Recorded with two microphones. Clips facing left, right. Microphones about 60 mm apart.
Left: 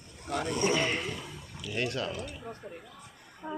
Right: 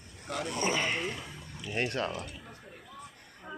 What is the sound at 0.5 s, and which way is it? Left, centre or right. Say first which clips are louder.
Speech: left 2 dB; centre.